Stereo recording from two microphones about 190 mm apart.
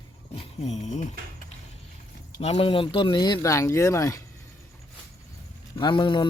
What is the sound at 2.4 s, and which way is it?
Speech, 30° left (ahead or behind).